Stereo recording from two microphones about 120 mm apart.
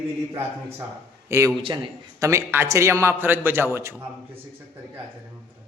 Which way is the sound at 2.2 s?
20° right (ahead or behind).